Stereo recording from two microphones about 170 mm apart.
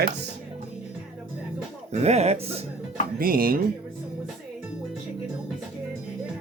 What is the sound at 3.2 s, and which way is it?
Speech, 60° right (ahead or behind).